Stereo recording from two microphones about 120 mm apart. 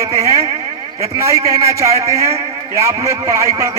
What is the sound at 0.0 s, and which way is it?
A man's voice, 25° right (ahead or behind).